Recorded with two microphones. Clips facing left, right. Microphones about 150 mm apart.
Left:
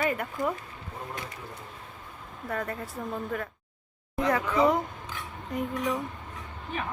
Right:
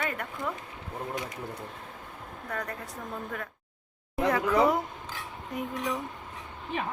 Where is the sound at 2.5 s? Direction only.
5° left (ahead or behind).